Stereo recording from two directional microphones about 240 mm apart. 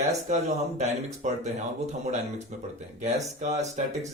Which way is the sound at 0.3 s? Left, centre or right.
Right.